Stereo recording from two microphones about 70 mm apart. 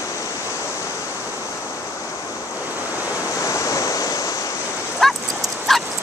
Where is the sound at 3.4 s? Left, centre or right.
Left.